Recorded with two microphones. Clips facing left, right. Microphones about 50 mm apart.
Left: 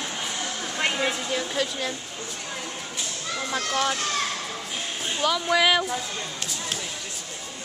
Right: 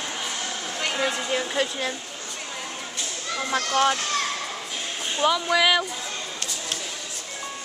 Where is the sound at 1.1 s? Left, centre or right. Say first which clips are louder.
Right 2 dB; centre.